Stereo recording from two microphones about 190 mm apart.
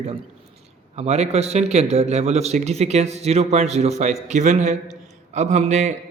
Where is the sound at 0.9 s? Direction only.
35° right (ahead or behind).